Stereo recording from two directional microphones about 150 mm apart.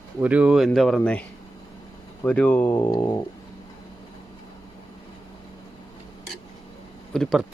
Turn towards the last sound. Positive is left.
turn(degrees=0)  # may be behind; listen again after turning